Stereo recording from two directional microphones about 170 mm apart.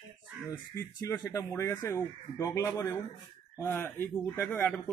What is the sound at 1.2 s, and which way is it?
Speech, 15° left (ahead or behind).